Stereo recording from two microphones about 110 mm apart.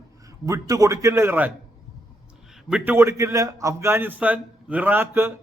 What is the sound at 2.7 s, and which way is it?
A man's voice, 20° right (ahead or behind).